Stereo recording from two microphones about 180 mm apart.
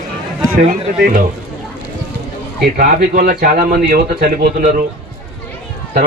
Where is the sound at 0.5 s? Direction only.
50° right (ahead or behind).